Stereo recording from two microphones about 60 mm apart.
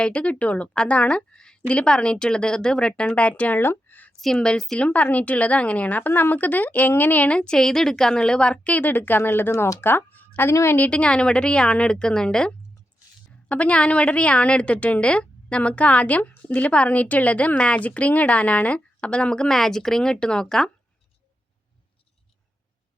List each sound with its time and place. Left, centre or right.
0.0 s a woman's voice: centre
3.6 s a sound: left
4.4 s a woman's voice: centre
4.8 s a woman's voice: left
7.3 s a woman's voice: centre; by 10.5 s left
10.5 s a woman's voice: left
10.8 s a woman's voice: left
13.5 s a woman's voice: left